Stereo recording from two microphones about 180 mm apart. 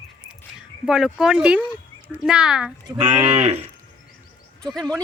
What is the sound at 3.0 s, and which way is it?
Cattle, 20° right (ahead or behind).